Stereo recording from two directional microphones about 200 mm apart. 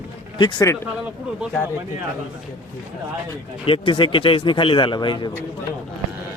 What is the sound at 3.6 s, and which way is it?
Speech, 25° left (ahead or behind).